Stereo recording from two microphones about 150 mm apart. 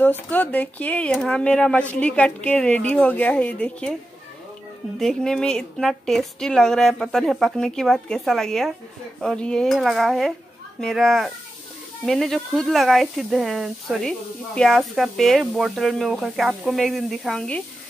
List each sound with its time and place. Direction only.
0.0 s speech: 10° left (ahead or behind)
4.9 s speech: 5° left (ahead or behind)